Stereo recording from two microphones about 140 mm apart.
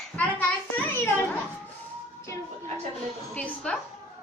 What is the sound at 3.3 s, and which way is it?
Speech, 10° left (ahead or behind).